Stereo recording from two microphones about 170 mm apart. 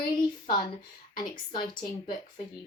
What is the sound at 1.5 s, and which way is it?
Speech, 30° left (ahead or behind).